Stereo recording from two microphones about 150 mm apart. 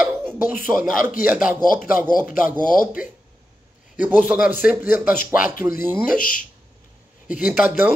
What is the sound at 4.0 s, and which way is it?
Speech, 10° right (ahead or behind).